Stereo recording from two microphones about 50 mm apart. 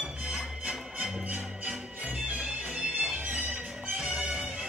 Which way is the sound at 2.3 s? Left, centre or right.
Right.